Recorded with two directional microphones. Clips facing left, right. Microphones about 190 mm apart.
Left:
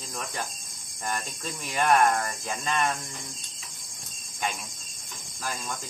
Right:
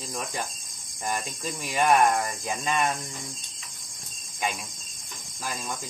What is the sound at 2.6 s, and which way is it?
Speech, 5° right (ahead or behind).